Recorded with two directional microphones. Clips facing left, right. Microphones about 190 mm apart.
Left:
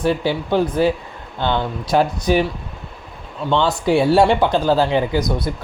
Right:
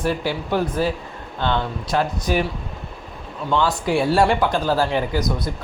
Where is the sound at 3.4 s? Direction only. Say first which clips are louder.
Left 3 dB; 25° left (ahead or behind).